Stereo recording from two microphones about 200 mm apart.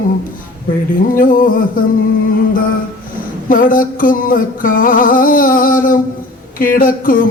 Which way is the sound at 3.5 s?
45° left (ahead or behind).